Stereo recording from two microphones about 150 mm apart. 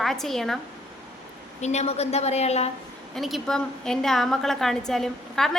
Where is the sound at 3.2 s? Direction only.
Centre (ahead or behind).